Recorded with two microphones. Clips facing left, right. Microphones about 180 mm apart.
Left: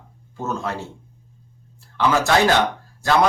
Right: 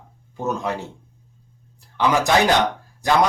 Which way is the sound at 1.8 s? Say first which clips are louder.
Even; 15° right (ahead or behind).